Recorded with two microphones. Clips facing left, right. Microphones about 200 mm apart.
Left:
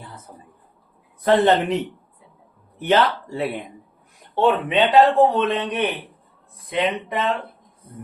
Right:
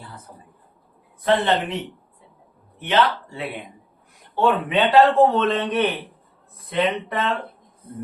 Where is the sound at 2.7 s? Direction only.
40° left (ahead or behind).